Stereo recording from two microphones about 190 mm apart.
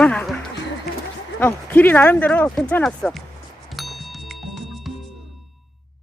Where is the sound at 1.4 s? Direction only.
10° left (ahead or behind).